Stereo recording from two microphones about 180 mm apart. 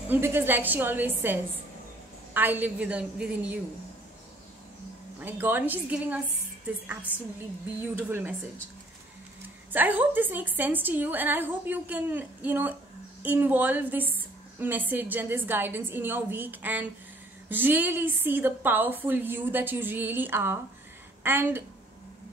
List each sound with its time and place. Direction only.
0.1 s a woman's voice: 10° right (ahead or behind)
5.2 s a woman's voice: 10° right (ahead or behind)
7.8 s a woman's voice: 10° right (ahead or behind)
9.7 s a woman's voice: 10° right (ahead or behind)